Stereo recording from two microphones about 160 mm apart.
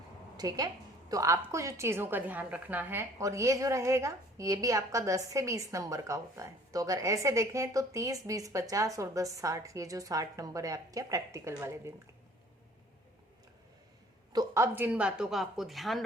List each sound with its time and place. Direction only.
0.3 s a woman's voice: 25° right (ahead or behind)
14.3 s a woman's voice: 20° right (ahead or behind); by 16.0 s centre (ahead or behind)